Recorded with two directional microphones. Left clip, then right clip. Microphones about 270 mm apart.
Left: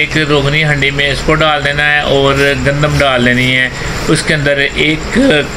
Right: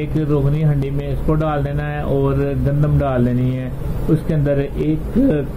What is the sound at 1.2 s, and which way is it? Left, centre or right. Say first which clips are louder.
Speech: left 7 dB; centre.